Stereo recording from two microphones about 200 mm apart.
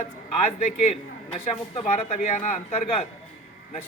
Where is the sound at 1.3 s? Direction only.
30° left (ahead or behind).